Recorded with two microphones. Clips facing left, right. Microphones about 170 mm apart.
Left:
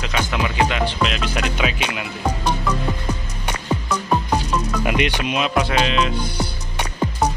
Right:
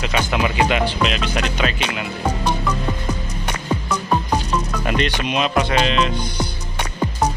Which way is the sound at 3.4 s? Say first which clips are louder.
Even; 10° left (ahead or behind).